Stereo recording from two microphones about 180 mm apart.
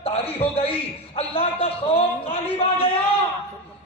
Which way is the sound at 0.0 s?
35° left (ahead or behind).